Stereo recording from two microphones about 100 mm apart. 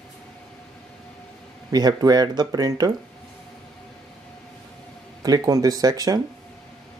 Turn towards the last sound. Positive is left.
turn(degrees=-40)  # may be behind; listen again after turning